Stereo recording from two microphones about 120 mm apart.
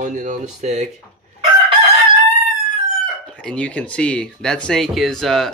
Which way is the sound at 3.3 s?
10° left (ahead or behind).